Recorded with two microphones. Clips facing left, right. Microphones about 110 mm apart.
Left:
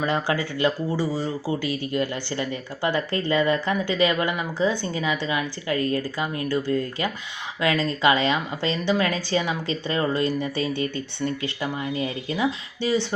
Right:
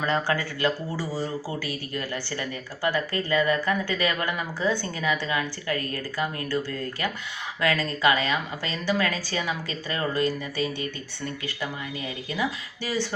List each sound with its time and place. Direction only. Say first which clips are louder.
0.0 s speech: left 2 dB; 15° left (ahead or behind)